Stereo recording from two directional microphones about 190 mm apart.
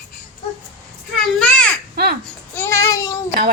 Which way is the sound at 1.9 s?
55° right (ahead or behind).